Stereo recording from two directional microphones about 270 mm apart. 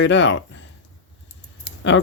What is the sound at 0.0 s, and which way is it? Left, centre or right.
Speech, left.